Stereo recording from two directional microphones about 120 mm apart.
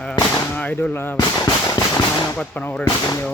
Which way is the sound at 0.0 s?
10° left (ahead or behind).